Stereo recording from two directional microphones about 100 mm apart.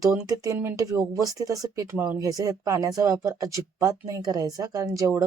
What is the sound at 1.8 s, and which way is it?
Speech, 15° right (ahead or behind).